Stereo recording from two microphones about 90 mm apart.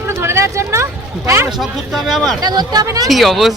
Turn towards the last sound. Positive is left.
turn(degrees=0)  # may be behind; listen again after turning